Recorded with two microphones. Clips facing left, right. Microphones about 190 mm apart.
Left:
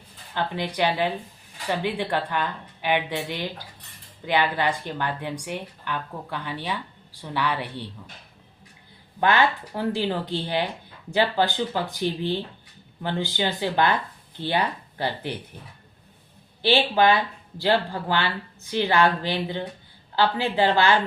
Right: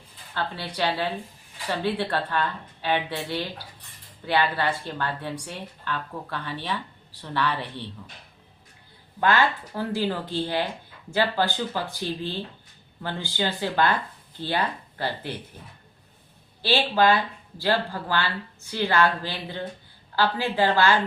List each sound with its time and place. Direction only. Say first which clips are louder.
0.3 s speech: left 3 dB; 15° left (ahead or behind)
9.2 s speech: left 1 dB; 20° left (ahead or behind)
16.6 s speech: left 2 dB; 20° left (ahead or behind)